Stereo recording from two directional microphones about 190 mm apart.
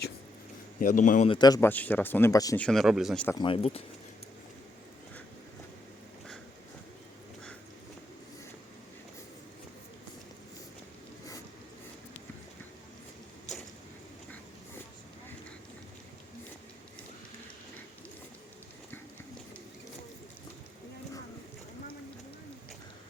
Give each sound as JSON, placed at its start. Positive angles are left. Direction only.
{"t": 0.8, "sound": "a man's voice", "side_deg": 45}
{"t": 1.3, "sound": "speech", "side_deg": 20}
{"t": 1.7, "sound": "speech", "side_deg": 10}
{"t": 2.6, "sound": "speech", "side_deg": 5}
{"t": 3.4, "sound": "speech", "side_deg": 30}